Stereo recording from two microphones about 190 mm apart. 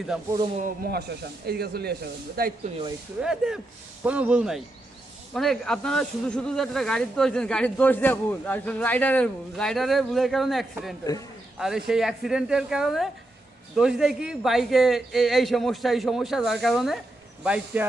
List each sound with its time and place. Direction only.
0.1 s speech: centre (ahead or behind)
0.9 s speech: 60° right (ahead or behind)
3.2 s speech: 5° right (ahead or behind)